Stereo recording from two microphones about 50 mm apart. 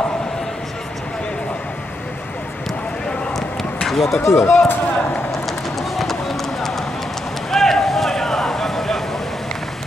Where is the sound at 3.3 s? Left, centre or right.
Centre.